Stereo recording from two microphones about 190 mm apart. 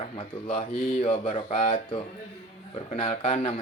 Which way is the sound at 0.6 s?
40° left (ahead or behind).